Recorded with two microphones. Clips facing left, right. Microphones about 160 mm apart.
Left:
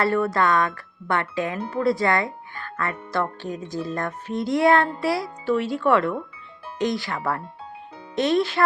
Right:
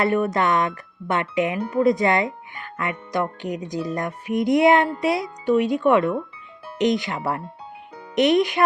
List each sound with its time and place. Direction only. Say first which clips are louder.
0.0 s speech: right 1 dB; 20° right (ahead or behind)